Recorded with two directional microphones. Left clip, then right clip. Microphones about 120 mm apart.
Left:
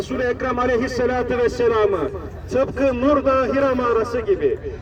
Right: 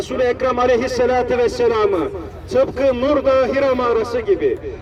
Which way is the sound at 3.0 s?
20° right (ahead or behind).